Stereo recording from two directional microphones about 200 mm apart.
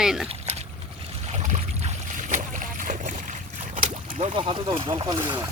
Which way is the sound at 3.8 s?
30° right (ahead or behind).